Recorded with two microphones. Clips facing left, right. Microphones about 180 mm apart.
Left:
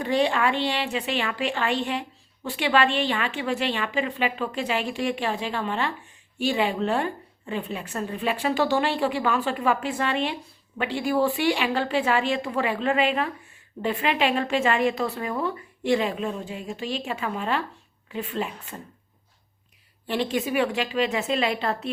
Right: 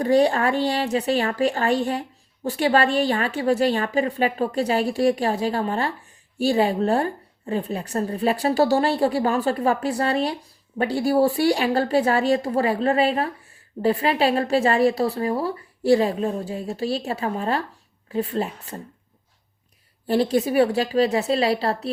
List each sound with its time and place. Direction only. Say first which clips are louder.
0.0 s a woman's voice: right 5 dB; 40° right (ahead or behind)
20.1 s a woman's voice: right 6 dB; 40° right (ahead or behind)